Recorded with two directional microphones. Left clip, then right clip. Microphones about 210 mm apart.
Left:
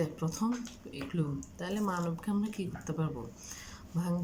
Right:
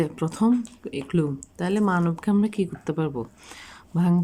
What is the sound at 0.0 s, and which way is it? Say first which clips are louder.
Speech: right 10 dB; 50° right (ahead or behind).